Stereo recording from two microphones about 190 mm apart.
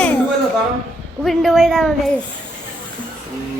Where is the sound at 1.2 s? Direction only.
Centre (ahead or behind).